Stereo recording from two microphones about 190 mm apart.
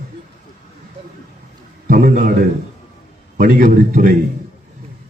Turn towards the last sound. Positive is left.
turn(degrees=-45)  # may be behind; listen again after turning